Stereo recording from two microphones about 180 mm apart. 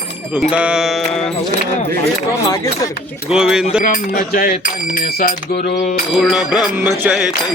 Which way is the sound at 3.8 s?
50° left (ahead or behind).